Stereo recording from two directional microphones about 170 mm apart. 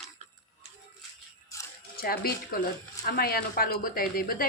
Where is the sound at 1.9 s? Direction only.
65° left (ahead or behind).